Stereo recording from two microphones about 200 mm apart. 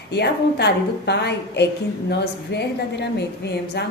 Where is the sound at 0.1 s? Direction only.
55° left (ahead or behind).